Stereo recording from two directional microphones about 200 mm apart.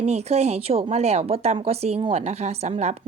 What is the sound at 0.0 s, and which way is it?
Speech, 30° right (ahead or behind).